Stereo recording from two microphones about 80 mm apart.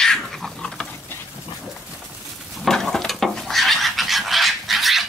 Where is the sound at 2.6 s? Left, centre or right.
Centre.